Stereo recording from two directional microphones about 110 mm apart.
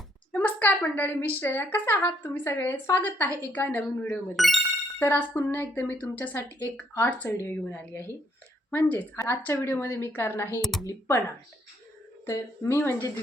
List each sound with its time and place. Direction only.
0.3 s a sound: 15° left (ahead or behind)
1.4 s a woman's voice: 20° left (ahead or behind)
4.4 s speech: centre (ahead or behind)
4.9 s a woman's voice: 15° left (ahead or behind)
10.6 s speech: centre (ahead or behind)
12.2 s a woman's voice: 25° left (ahead or behind)